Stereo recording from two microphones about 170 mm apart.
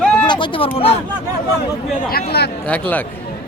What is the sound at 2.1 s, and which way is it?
Speech, 65° left (ahead or behind).